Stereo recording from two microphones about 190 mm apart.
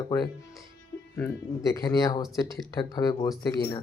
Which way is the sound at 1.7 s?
20° left (ahead or behind).